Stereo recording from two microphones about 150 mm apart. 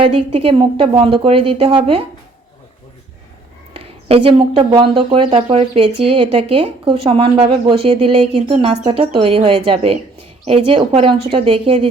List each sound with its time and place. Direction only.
0.0 s a woman's voice: 35° right (ahead or behind)
3.8 s a woman's voice: 40° right (ahead or behind)